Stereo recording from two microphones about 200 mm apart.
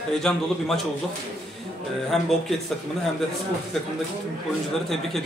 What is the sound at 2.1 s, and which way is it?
Speech, centre (ahead or behind).